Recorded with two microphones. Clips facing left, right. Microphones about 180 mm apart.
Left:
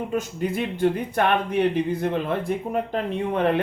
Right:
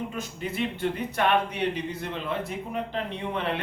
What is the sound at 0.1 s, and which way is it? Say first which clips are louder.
Speech: left 8 dB; 45° left (ahead or behind).